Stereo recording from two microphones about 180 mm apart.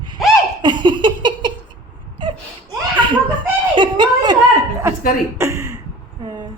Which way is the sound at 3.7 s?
25° right (ahead or behind).